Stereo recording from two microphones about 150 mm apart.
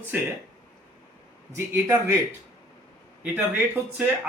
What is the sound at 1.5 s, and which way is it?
Speech, 15° right (ahead or behind).